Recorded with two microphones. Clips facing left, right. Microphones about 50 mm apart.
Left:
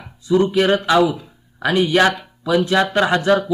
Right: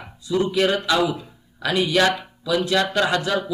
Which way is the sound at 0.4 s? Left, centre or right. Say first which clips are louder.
Left 4 dB; left.